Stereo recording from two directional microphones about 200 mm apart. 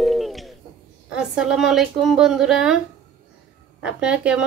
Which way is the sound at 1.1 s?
5° right (ahead or behind).